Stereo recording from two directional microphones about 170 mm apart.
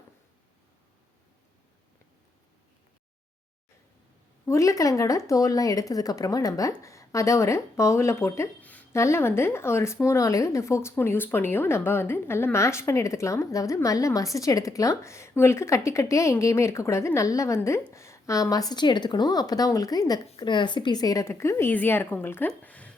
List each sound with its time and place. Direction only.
4.4 s a woman's voice: 20° left (ahead or behind)
20.2 s speech: 30° left (ahead or behind); by 23.0 s 10° left (ahead or behind)